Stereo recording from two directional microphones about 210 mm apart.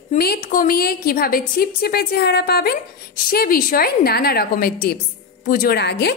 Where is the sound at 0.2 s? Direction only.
45° left (ahead or behind).